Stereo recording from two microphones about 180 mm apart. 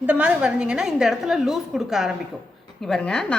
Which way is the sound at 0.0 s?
10° right (ahead or behind).